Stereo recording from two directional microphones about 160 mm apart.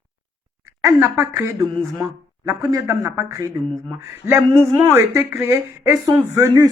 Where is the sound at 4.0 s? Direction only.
15° right (ahead or behind).